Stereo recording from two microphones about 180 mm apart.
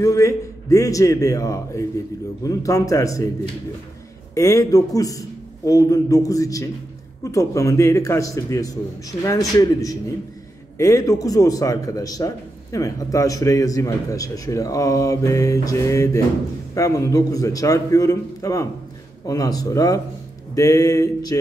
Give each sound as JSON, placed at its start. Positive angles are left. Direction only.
{"t": 0.0, "sound": "a man's voice", "side_deg": 15}
{"t": 4.4, "sound": "a man's voice", "side_deg": 20}